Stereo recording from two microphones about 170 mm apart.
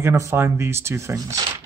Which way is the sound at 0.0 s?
15° right (ahead or behind).